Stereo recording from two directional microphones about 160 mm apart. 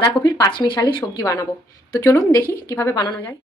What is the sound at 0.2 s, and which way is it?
A woman's voice, 25° left (ahead or behind).